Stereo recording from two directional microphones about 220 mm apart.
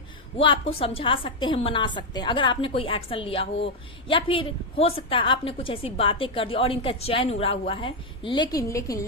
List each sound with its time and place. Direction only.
0.3 s a woman's voice: 25° left (ahead or behind)